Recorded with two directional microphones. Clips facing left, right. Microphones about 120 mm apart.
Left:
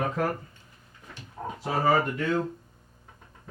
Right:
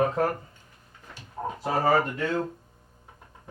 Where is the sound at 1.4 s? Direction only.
30° right (ahead or behind).